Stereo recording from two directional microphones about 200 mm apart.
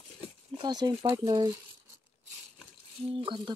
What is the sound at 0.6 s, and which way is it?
Speech, 20° right (ahead or behind).